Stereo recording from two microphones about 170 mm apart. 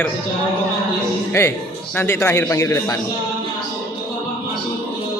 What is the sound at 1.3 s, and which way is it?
A man's voice, 15° left (ahead or behind).